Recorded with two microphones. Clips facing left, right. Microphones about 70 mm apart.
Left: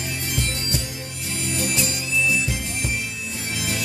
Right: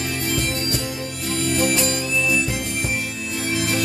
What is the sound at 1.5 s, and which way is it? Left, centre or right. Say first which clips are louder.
Music: right 5 dB; right.